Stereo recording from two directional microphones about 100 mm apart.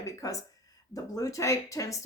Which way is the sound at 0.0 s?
35° left (ahead or behind).